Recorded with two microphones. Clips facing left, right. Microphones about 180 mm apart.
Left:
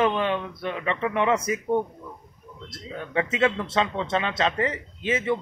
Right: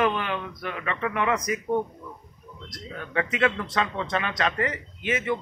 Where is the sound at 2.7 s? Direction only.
25° left (ahead or behind).